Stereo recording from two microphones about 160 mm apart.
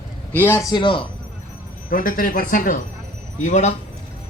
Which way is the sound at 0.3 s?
15° left (ahead or behind).